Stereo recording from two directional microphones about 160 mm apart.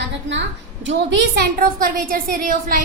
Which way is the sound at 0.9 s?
90° right.